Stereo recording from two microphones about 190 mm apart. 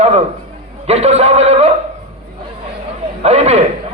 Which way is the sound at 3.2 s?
35° right (ahead or behind).